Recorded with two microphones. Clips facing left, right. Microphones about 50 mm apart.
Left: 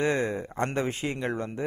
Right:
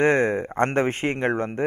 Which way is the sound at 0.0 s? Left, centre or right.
Right.